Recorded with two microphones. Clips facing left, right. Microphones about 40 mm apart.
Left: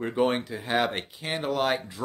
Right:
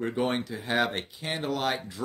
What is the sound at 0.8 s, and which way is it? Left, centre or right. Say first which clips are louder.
Speech: left 1 dB; centre.